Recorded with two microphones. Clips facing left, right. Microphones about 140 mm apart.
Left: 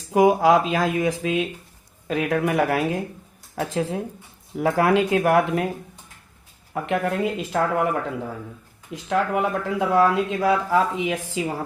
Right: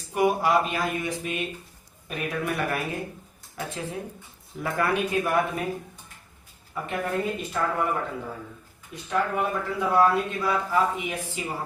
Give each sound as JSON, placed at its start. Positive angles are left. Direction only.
{"t": 0.1, "sound": "speech", "side_deg": 90}
{"t": 6.7, "sound": "speech", "side_deg": 80}
{"t": 9.0, "sound": "speech", "side_deg": 90}